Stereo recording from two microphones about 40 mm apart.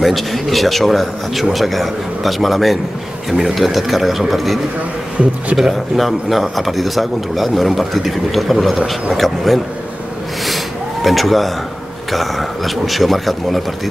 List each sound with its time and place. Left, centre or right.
0.0 s a man's voice: centre
5.6 s a man's voice: centre
10.4 s a sound: centre
12.1 s a man's voice: centre